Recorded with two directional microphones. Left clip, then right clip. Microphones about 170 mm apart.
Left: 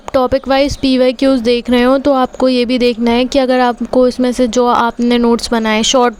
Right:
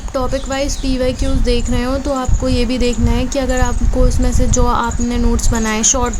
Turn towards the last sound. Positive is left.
turn(degrees=40)  # may be behind; listen again after turning